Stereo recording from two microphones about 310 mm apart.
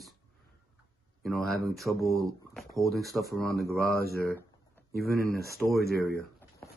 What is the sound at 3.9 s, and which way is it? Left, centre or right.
Speech, left.